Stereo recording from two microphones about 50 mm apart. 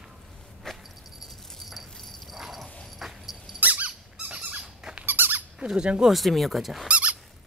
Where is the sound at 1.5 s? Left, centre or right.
Centre.